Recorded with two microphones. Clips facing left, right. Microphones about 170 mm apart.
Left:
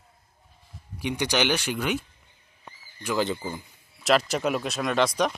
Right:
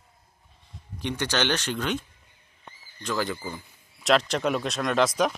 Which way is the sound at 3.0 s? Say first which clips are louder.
Left 2 dB; 20° left (ahead or behind).